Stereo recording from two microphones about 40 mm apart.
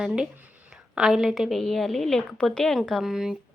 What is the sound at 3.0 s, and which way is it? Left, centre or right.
Speech, centre.